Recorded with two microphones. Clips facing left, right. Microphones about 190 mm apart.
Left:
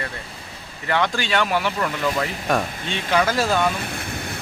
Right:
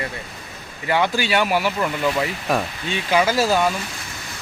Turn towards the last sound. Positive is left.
turn(degrees=-5)  # may be behind; listen again after turning